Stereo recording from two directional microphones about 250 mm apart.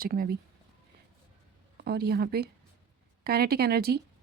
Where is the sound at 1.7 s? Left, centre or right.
Right.